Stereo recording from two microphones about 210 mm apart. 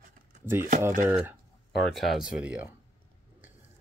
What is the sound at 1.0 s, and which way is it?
Speech, 15° right (ahead or behind).